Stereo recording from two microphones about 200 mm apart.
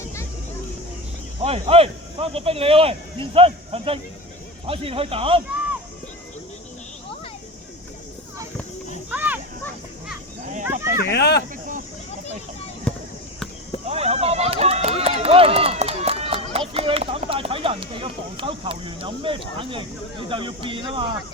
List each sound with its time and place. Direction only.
1.4 s speech: 30° right (ahead or behind)
9.0 s children playing: 10° right (ahead or behind)
11.1 s speech: 55° left (ahead or behind)
12.9 s basketball bounce: 5° left (ahead or behind)
13.8 s run: 30° right (ahead or behind)